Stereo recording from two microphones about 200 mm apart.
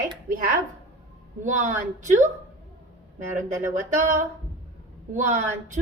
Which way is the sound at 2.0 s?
40° right (ahead or behind).